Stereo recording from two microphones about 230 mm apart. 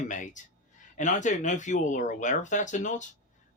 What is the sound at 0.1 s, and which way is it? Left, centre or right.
Speech, left.